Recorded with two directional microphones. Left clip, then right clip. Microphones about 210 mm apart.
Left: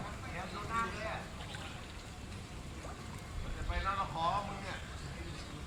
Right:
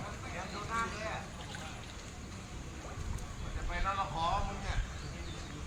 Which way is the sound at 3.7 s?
50° right (ahead or behind).